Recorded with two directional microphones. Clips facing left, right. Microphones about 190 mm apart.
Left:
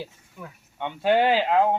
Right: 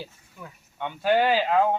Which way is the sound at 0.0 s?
10° left (ahead or behind).